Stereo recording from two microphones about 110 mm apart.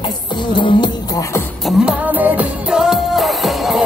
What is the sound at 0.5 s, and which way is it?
Music, 45° left (ahead or behind).